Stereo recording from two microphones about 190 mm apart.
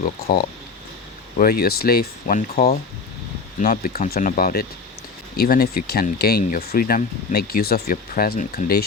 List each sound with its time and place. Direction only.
0.0 s speech: 50° left (ahead or behind)
2.2 s speech: 35° left (ahead or behind)